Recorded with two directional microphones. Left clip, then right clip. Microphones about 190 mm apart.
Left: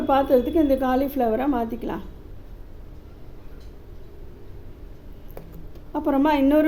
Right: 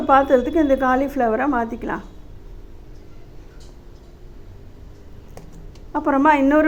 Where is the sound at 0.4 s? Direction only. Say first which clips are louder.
Right 3 dB; 10° left (ahead or behind).